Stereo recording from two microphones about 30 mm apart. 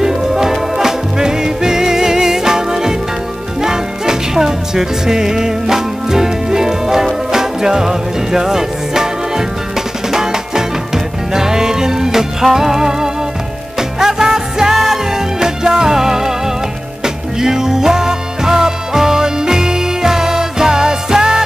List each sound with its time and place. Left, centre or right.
0.0 s music: centre